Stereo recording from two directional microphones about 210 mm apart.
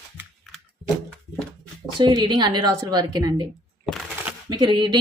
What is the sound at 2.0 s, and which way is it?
Speech, 20° right (ahead or behind).